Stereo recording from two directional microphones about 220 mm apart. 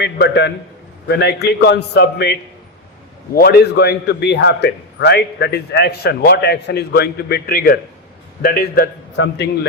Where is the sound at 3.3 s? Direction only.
45° left (ahead or behind).